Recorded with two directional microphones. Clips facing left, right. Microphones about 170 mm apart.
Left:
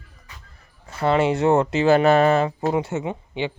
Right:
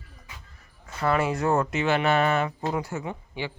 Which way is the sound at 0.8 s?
25° left (ahead or behind).